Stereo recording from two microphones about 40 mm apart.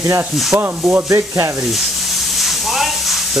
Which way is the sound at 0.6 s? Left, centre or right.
Right.